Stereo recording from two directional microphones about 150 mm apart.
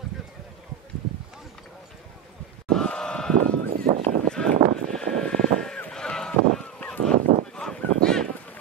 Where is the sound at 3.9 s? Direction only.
50° right (ahead or behind).